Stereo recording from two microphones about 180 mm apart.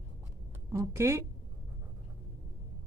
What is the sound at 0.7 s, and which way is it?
Speech, 15° right (ahead or behind).